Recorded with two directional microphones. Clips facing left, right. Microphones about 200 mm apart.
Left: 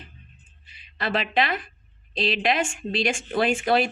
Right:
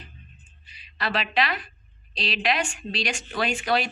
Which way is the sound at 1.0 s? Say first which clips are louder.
Left 2 dB; 50° left (ahead or behind).